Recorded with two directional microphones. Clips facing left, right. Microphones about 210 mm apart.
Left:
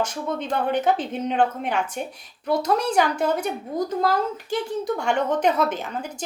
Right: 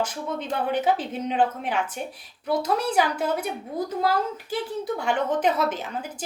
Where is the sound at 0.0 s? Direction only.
5° right (ahead or behind).